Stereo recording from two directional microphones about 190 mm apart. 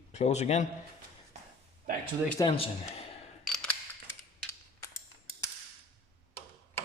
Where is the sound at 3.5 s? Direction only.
5° left (ahead or behind).